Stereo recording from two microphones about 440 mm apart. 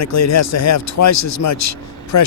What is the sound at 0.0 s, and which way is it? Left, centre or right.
Speech, left.